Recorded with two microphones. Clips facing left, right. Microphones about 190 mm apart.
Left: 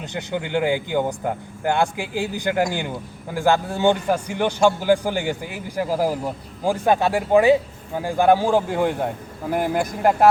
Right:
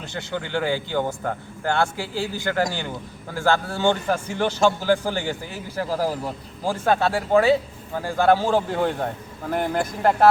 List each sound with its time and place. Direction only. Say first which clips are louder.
0.0 s a man's voice: left 3 dB; 20° left (ahead or behind)